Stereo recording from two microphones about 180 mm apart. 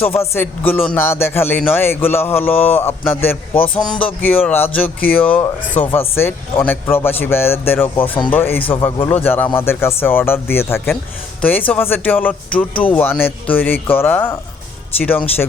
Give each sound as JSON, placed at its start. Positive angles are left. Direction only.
{"t": 0.0, "sound": "speech", "side_deg": 10}
{"t": 8.6, "sound": "speech", "side_deg": 30}
{"t": 9.2, "sound": "speech", "side_deg": 10}